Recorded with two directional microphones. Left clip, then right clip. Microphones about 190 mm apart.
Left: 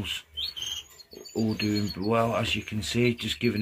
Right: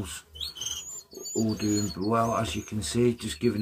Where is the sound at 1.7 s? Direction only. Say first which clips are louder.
Right 1 dB; 15° left (ahead or behind).